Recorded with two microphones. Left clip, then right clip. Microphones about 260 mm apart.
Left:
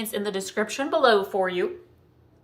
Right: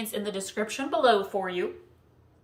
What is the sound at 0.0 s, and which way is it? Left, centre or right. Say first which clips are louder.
Speech: left 4 dB; centre.